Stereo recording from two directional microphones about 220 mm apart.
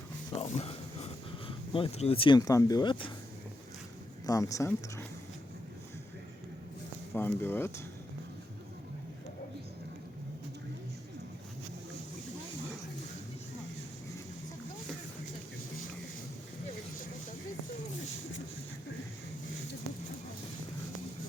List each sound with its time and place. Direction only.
0.4 s speech: 30° left (ahead or behind)
4.3 s speech: 15° left (ahead or behind)
7.1 s speech: 10° left (ahead or behind)